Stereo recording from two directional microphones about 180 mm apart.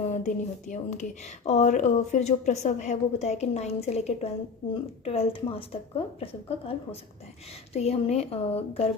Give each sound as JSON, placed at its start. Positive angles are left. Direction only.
{"t": 0.1, "sound": "speech", "side_deg": 40}